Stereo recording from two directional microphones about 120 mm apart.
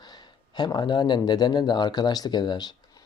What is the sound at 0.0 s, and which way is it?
Speech, 35° left (ahead or behind).